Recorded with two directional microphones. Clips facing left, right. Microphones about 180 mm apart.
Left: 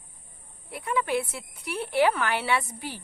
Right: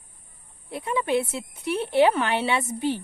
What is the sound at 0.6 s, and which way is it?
Speech, 25° right (ahead or behind).